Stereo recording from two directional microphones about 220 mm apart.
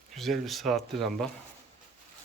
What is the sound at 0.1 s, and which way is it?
Speech, centre (ahead or behind).